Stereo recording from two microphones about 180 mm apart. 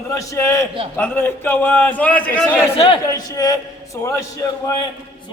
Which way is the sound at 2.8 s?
25° left (ahead or behind).